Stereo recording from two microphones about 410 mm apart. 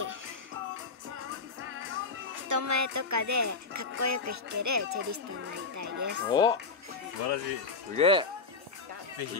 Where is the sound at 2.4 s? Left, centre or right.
Right.